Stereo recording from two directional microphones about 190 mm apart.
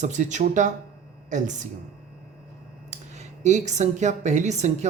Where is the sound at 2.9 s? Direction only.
35° right (ahead or behind).